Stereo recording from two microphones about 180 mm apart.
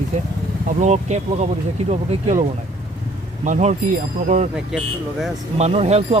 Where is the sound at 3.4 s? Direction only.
40° right (ahead or behind).